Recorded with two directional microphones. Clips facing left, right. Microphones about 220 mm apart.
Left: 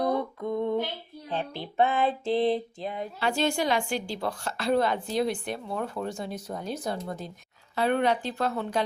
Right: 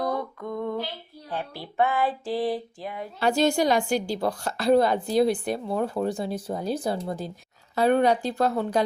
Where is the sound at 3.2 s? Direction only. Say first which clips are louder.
Right 6 dB; 40° right (ahead or behind).